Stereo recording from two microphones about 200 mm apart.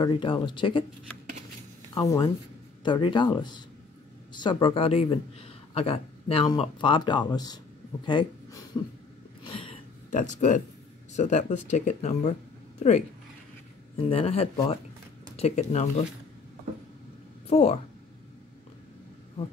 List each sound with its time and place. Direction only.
0.0 s speech: 25° left (ahead or behind)
2.0 s speech: 20° left (ahead or behind)
9.4 s a sound: 25° left (ahead or behind)
10.1 s speech: 35° left (ahead or behind)
17.5 s speech: 35° left (ahead or behind)